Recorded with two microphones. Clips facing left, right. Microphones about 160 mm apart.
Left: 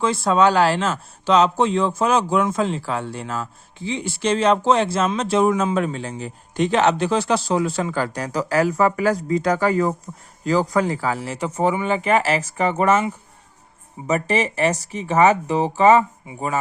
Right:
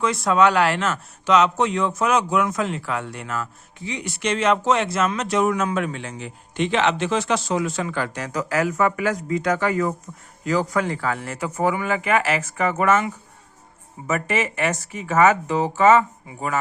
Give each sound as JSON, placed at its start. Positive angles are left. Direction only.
{"t": 0.0, "sound": "speech", "side_deg": 30}
{"t": 14.1, "sound": "speech", "side_deg": 30}